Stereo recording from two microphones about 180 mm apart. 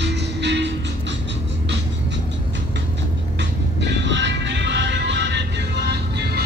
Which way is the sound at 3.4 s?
80° right.